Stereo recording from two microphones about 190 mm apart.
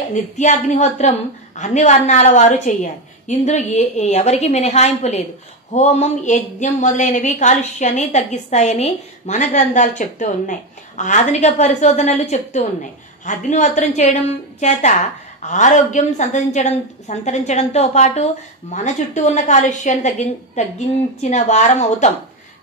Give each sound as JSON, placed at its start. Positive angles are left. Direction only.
{"t": 0.1, "sound": "a woman's voice", "side_deg": 40}